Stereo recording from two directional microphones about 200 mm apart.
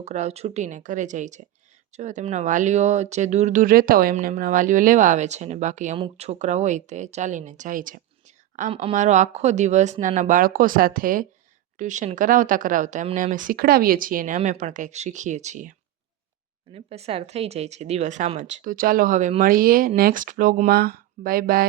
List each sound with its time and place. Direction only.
0.0 s speech: 35° right (ahead or behind)
8.7 s speech: 30° right (ahead or behind)
16.7 s speech: 30° right (ahead or behind); by 21.6 s 45° right (ahead or behind)